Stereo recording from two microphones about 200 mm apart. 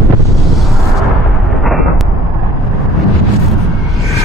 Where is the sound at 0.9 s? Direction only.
Centre (ahead or behind).